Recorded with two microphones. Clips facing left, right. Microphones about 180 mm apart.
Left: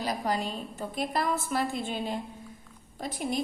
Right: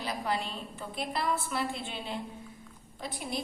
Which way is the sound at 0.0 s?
40° left (ahead or behind).